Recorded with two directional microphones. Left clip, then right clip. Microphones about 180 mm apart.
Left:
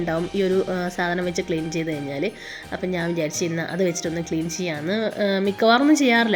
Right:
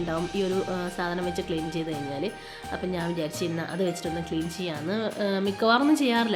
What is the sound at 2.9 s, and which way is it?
Speech, 15° left (ahead or behind).